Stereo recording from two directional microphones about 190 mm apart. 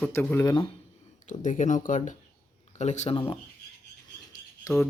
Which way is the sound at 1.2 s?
40° left (ahead or behind).